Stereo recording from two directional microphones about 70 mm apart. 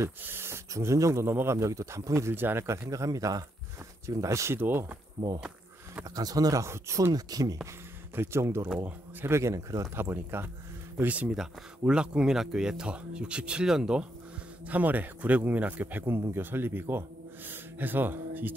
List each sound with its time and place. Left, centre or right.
0.2 s speech: right
2.9 s speech: right
4.6 s speech: right
6.1 s speech: right
8.2 s speech: right
10.1 s speech: right
11.1 s speech: centre
14.7 s speech: right